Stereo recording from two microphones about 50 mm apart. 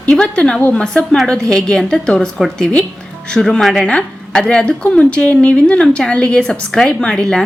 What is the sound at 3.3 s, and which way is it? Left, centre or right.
Speech, centre.